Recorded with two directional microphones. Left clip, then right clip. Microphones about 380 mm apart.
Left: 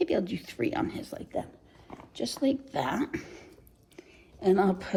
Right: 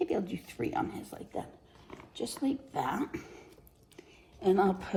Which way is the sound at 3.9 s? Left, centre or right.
Left.